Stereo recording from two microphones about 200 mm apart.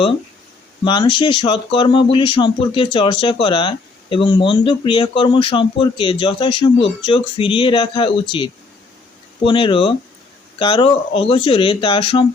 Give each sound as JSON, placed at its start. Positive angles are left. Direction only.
{"t": 0.9, "sound": "speech", "side_deg": 25}